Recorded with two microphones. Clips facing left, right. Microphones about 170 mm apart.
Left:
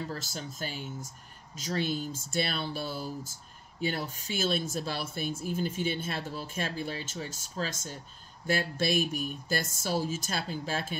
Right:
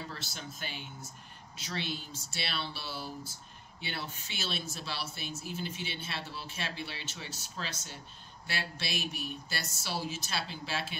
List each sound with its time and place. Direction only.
0.1 s speech: 40° left (ahead or behind)